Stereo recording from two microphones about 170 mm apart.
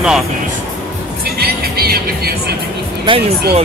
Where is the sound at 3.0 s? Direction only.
30° right (ahead or behind).